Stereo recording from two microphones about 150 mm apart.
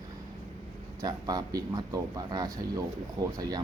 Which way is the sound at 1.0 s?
25° right (ahead or behind).